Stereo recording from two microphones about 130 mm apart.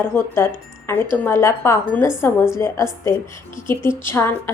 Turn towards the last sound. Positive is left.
turn(degrees=20)  # may be behind; listen again after turning